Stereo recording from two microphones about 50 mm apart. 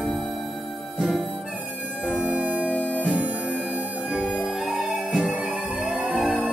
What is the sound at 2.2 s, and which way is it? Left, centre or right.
Organ, right.